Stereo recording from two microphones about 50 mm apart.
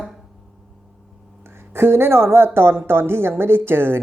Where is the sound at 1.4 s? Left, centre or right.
Right.